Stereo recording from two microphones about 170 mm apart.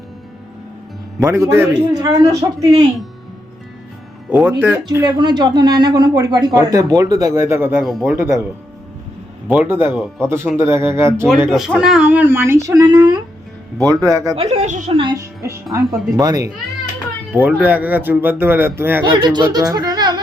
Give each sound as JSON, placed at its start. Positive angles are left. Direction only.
{"t": 1.2, "sound": "speech", "side_deg": -15}
{"t": 4.3, "sound": "speech", "side_deg": -10}
{"t": 4.9, "sound": "speech", "side_deg": -25}
{"t": 7.9, "sound": "speech", "side_deg": 0}
{"t": 8.1, "sound": "speech", "side_deg": -15}
{"t": 9.5, "sound": "speech", "side_deg": -10}
{"t": 9.9, "sound": "speech", "side_deg": 0}
{"t": 10.2, "sound": "speech", "side_deg": -15}
{"t": 11.4, "sound": "speech", "side_deg": 0}
{"t": 14.3, "sound": "a woman's voice", "side_deg": -40}
{"t": 14.9, "sound": "speech", "side_deg": -25}
{"t": 17.3, "sound": "speech", "side_deg": -10}
{"t": 19.1, "sound": "speech", "side_deg": -25}